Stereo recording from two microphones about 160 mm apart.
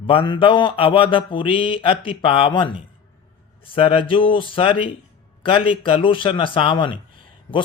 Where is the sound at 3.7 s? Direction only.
35° left (ahead or behind).